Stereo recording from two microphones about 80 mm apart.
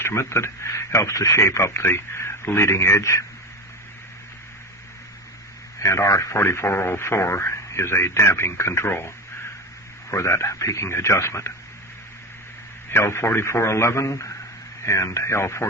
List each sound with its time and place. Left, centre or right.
0.0 s speech: left
5.8 s speech: left
12.9 s speech: left